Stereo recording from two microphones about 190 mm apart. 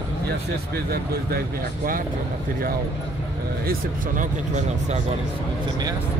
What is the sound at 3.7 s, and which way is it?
Speech, 40° right (ahead or behind).